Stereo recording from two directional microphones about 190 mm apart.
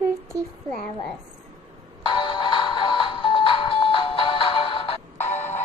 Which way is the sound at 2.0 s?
25° left (ahead or behind).